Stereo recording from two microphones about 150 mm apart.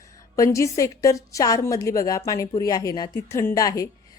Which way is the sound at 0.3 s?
20° left (ahead or behind).